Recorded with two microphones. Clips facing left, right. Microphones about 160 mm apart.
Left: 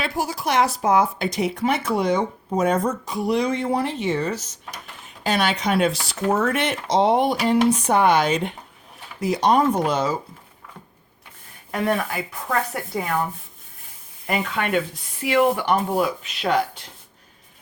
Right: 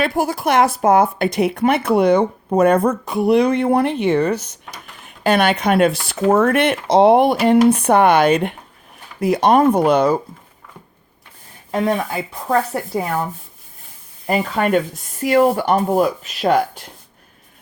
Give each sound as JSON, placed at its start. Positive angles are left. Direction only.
{"t": 0.0, "sound": "speech", "side_deg": -55}
{"t": 11.7, "sound": "speech", "side_deg": -20}
{"t": 14.3, "sound": "speech", "side_deg": -35}